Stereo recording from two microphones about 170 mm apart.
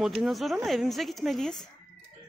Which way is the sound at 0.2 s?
Centre (ahead or behind).